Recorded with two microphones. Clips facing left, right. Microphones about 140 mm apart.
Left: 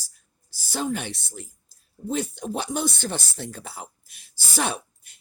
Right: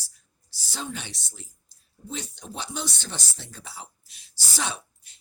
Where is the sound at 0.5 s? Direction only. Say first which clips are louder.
Left 8 dB; 50° left (ahead or behind).